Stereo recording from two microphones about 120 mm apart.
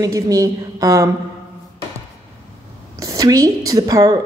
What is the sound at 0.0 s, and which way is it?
A woman's voice, 30° right (ahead or behind).